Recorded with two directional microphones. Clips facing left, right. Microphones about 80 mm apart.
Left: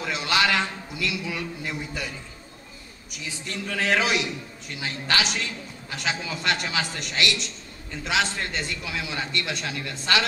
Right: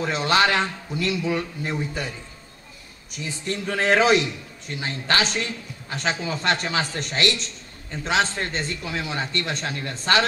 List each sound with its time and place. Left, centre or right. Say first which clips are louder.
0.0 s a man's voice: right 4 dB; right